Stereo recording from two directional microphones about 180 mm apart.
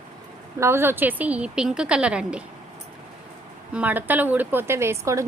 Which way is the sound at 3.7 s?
10° right (ahead or behind).